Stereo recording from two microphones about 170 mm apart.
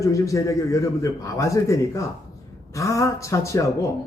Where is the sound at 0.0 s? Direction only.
20° left (ahead or behind).